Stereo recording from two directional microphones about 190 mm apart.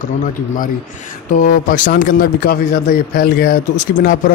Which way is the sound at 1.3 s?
45° left (ahead or behind).